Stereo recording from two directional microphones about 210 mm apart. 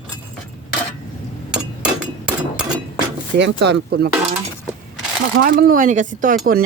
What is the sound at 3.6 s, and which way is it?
Speech, 55° right (ahead or behind).